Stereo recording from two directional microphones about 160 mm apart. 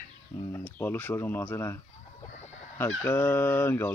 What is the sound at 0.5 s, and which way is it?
Speech, 15° left (ahead or behind).